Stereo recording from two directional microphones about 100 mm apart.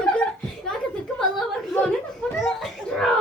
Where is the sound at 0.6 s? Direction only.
5° left (ahead or behind).